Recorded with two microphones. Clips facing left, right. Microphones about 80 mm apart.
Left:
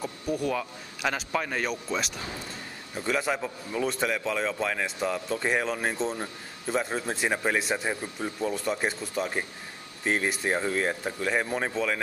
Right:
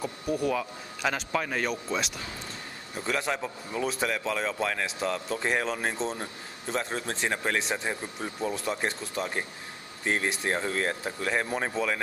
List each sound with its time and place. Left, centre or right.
0.0 s a man's voice: centre